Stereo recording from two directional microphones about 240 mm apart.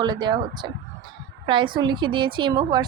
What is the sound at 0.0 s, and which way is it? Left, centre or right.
A woman's voice, centre.